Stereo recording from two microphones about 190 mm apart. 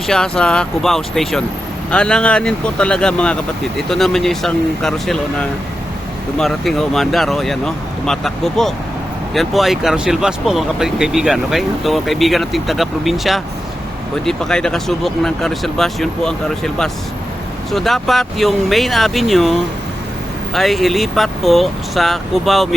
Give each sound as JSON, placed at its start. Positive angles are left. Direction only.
{"t": 0.1, "sound": "speech", "side_deg": 5}